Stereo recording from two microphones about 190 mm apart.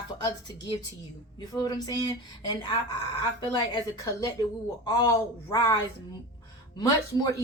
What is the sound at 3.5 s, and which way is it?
Speech, 20° left (ahead or behind).